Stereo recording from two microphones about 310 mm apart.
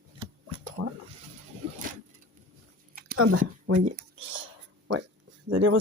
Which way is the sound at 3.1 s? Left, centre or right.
Right.